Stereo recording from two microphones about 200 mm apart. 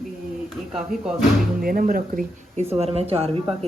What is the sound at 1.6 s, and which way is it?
Speech, 45° right (ahead or behind).